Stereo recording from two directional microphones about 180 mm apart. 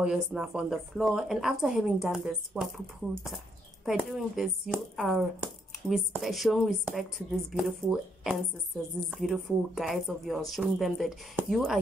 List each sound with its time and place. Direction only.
0.0 s speech: 5° right (ahead or behind)
3.8 s speech: centre (ahead or behind)